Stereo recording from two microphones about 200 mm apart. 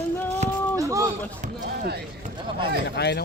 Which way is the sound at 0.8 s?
15° right (ahead or behind).